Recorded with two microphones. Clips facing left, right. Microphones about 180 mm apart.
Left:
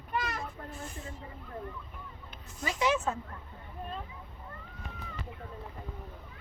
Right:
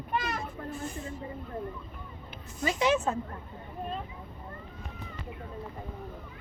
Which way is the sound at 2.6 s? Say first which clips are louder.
Right 3 dB; 20° right (ahead or behind).